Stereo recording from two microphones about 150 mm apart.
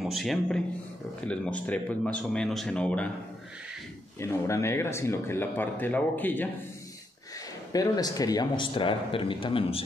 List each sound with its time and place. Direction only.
0.0 s speech: centre (ahead or behind)
4.2 s speech: 20° left (ahead or behind)
7.7 s a man's voice: 25° left (ahead or behind)